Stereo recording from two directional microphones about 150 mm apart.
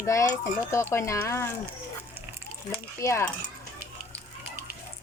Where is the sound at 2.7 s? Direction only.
20° left (ahead or behind).